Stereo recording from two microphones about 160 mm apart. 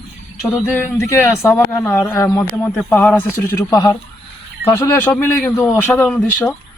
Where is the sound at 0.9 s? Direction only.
15° left (ahead or behind).